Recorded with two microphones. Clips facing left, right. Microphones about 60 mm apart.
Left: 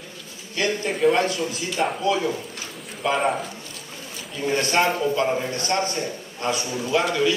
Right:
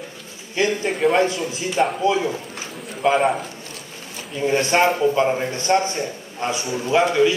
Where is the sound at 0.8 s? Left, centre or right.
Centre.